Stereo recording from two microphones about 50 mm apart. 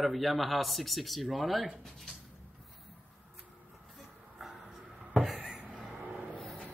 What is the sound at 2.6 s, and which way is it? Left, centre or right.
Vehicle, centre.